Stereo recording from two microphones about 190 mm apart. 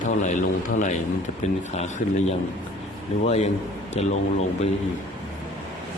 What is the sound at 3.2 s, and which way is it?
A man's voice, 35° left (ahead or behind).